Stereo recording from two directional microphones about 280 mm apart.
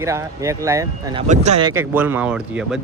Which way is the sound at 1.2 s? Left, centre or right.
Right.